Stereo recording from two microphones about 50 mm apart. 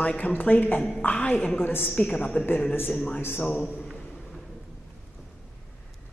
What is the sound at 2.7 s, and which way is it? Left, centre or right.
Speech, left.